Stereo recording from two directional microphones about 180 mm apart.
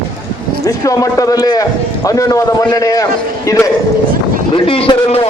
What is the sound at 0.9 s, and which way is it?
A man's voice, 20° left (ahead or behind).